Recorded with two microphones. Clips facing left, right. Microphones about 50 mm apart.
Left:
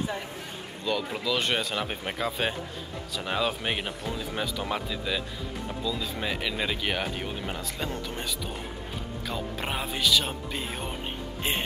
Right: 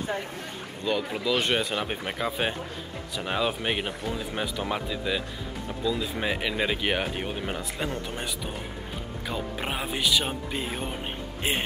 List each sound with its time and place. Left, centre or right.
0.8 s speech: centre
9.3 s speech: centre